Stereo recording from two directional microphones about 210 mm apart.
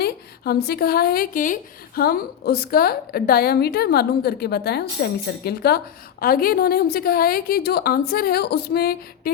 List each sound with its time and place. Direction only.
0.0 s a woman's voice: 50° left (ahead or behind)